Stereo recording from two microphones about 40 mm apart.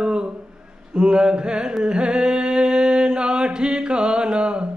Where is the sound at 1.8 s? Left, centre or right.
Right.